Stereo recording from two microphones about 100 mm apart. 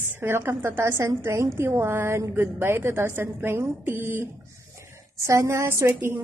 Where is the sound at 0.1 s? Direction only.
25° right (ahead or behind).